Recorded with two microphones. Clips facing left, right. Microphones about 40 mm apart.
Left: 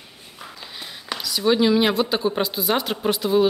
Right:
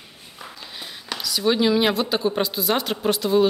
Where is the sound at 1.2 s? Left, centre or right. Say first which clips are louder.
Left 1 dB; centre.